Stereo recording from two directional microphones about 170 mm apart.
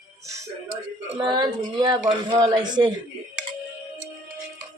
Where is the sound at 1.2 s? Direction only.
25° right (ahead or behind).